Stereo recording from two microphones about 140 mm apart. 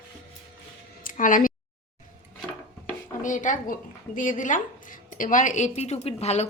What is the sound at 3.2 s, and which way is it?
Speech, 65° left (ahead or behind).